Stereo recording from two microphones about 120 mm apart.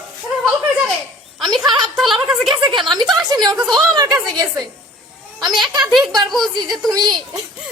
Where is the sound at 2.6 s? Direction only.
40° right (ahead or behind).